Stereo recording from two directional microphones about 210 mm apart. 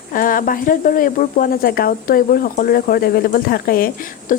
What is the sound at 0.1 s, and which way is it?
Speech, 40° left (ahead or behind).